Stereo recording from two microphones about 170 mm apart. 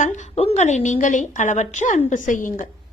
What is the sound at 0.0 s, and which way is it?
A woman's voice, 45° left (ahead or behind).